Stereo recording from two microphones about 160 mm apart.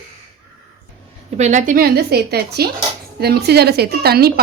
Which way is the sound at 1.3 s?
45° right (ahead or behind).